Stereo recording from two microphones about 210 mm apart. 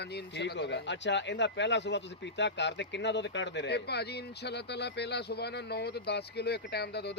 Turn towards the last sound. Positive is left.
turn(degrees=50)  # may be behind; listen again after turning